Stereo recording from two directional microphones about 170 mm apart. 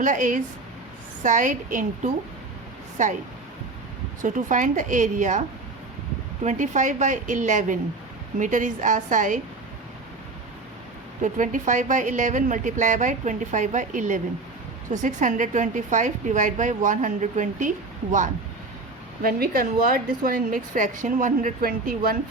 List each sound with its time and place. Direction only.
0.0 s a woman's voice: 50° right (ahead or behind)
4.2 s a woman's voice: 45° right (ahead or behind)
6.4 s a woman's voice: 45° right (ahead or behind)
11.2 s a woman's voice: 50° right (ahead or behind)
19.2 s a woman's voice: 60° right (ahead or behind)